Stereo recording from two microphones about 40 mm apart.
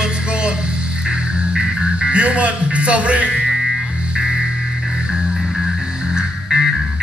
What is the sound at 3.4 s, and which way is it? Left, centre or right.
Music, centre.